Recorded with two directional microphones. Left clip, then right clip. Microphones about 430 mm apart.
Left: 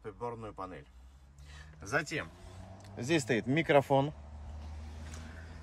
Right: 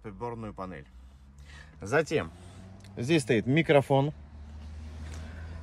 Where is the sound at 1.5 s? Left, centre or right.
Centre.